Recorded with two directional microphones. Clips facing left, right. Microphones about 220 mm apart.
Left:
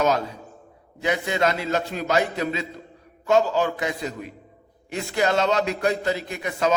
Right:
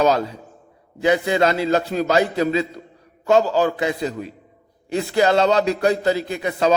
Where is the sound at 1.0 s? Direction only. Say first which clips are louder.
Right 5 dB; 30° right (ahead or behind).